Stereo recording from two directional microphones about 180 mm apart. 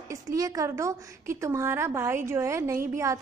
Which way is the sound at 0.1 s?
20° right (ahead or behind).